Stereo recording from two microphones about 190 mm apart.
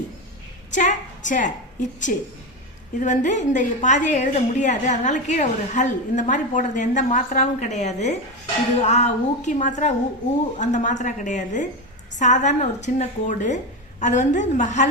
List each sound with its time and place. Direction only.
0.7 s a woman's voice: 40° left (ahead or behind)